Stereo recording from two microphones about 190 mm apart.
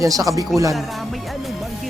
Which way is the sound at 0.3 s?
15° right (ahead or behind).